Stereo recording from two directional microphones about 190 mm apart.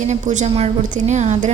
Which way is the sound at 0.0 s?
40° right (ahead or behind).